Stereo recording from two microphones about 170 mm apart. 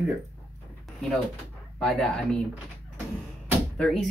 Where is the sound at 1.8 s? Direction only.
5° left (ahead or behind).